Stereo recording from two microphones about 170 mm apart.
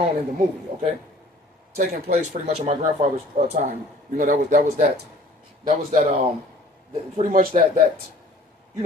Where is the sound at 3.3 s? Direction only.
50° right (ahead or behind).